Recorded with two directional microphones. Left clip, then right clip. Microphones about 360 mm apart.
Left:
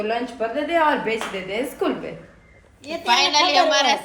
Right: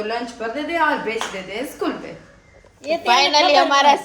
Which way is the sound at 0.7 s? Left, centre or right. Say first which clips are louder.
Even; centre.